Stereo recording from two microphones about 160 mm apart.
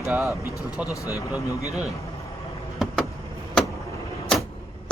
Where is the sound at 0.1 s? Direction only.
Centre (ahead or behind).